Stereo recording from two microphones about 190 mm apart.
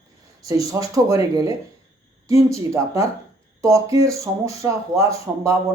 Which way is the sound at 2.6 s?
15° right (ahead or behind).